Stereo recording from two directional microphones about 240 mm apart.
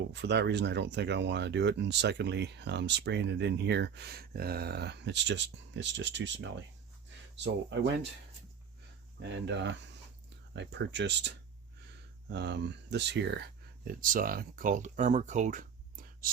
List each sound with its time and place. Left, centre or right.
0.1 s speech: right
9.2 s speech: right